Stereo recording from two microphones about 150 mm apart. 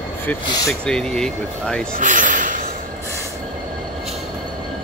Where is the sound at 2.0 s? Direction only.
60° right (ahead or behind).